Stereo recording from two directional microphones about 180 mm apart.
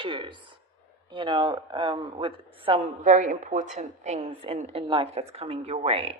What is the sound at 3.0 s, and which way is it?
Speech, 45° right (ahead or behind).